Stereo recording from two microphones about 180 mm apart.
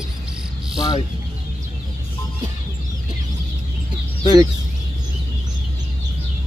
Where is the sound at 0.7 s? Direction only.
25° left (ahead or behind).